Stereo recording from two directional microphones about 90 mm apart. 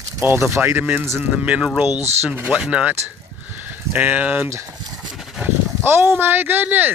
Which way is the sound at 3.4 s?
20° right (ahead or behind).